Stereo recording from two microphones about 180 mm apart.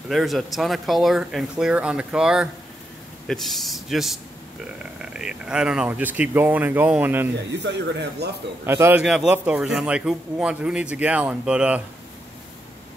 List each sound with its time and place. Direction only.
0.1 s speech: centre (ahead or behind)
7.5 s speech: 75° right (ahead or behind)
8.6 s speech: 15° right (ahead or behind)